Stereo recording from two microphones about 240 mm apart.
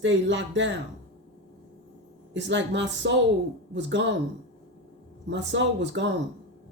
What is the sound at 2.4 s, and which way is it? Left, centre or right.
Speech, right.